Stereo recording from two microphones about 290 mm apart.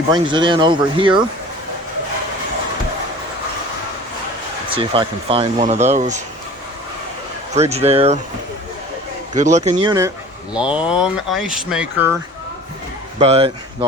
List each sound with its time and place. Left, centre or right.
0.1 s speech: centre
4.7 s speech: centre
7.5 s speech: right
9.3 s speech: right
10.5 s speech: centre
13.1 s speech: right